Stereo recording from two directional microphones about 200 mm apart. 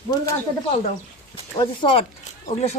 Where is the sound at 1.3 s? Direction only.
25° left (ahead or behind).